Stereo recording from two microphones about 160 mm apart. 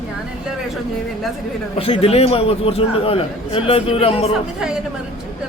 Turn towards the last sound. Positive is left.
turn(degrees=35)  # may be behind; listen again after turning